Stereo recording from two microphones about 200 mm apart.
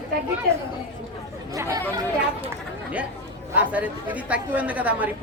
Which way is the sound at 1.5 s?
15° right (ahead or behind).